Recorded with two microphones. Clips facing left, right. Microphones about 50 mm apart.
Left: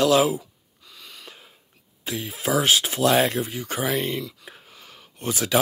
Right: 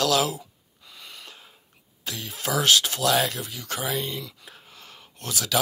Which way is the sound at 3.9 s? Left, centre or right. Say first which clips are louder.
Left 4 dB; left.